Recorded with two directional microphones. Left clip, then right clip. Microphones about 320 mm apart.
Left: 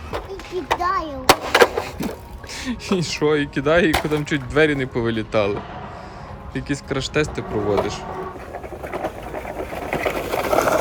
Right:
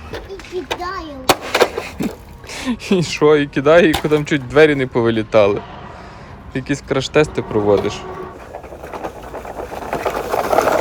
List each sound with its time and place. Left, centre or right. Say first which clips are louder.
0.9 s speech: right 3 dB; centre
9.9 s sewing machine: right 4 dB; centre